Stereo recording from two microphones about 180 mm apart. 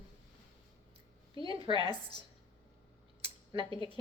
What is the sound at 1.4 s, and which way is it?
Speech, 30° right (ahead or behind).